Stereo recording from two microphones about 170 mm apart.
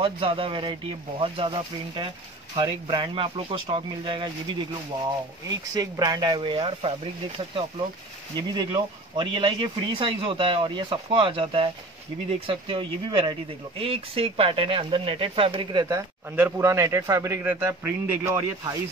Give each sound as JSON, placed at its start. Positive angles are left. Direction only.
{"t": 0.0, "sound": "speech", "side_deg": -30}
{"t": 5.8, "sound": "speech", "side_deg": -20}
{"t": 8.4, "sound": "speech", "side_deg": -25}
{"t": 16.3, "sound": "a man's voice", "side_deg": -15}